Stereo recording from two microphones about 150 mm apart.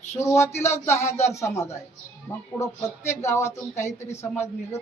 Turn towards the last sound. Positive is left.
turn(degrees=15)  # may be behind; listen again after turning